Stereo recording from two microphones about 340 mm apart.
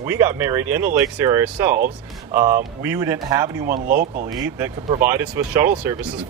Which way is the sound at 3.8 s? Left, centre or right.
Right.